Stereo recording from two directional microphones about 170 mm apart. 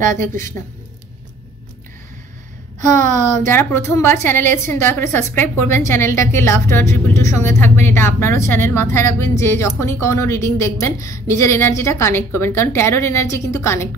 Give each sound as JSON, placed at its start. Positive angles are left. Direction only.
{"t": 2.8, "sound": "speech", "side_deg": -45}
{"t": 3.4, "sound": "a woman's voice", "side_deg": 15}